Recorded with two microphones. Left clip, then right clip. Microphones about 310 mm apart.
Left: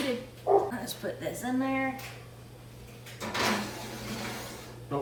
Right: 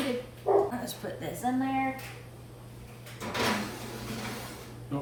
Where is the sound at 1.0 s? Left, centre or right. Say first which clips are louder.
Right 1 dB; centre.